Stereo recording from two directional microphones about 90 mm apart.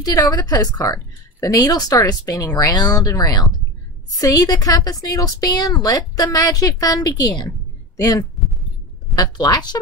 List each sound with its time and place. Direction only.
0.0 s a woman's voice: 45° left (ahead or behind)
9.2 s a woman's voice: 50° left (ahead or behind)